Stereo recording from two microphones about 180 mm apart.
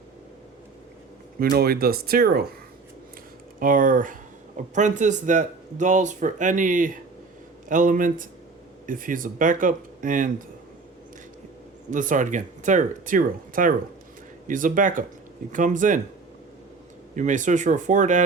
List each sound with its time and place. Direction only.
1.4 s speech: 60° right (ahead or behind)
3.6 s speech: 50° right (ahead or behind)
11.9 s speech: 45° right (ahead or behind)
17.2 s speech: 45° right (ahead or behind)